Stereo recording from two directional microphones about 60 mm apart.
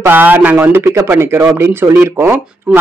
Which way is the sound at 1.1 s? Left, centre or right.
Right.